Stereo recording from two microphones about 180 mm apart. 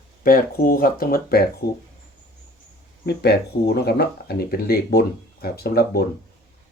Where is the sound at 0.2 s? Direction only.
55° left (ahead or behind).